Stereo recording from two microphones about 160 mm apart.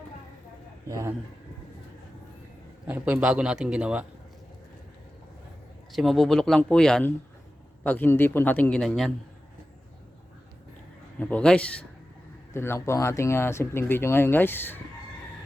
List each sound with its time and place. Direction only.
0.9 s a man's voice: 20° right (ahead or behind)
2.8 s a man's voice: 10° right (ahead or behind)
5.9 s speech: centre (ahead or behind)
11.2 s speech: 10° left (ahead or behind)